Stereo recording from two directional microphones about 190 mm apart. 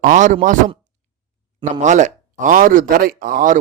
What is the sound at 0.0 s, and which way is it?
Speech, 40° right (ahead or behind).